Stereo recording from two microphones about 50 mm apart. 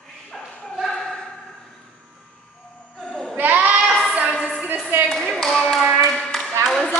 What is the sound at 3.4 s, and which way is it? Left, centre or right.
Child singing, right.